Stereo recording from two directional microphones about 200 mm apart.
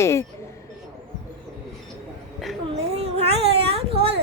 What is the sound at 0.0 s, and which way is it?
Speech, 15° left (ahead or behind).